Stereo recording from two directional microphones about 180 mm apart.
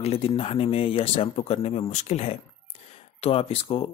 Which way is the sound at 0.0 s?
35° left (ahead or behind).